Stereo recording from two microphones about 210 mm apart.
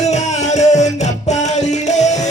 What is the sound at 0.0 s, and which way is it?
Music, 35° left (ahead or behind).